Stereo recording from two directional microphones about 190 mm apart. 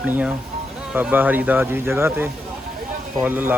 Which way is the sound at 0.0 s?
5° right (ahead or behind).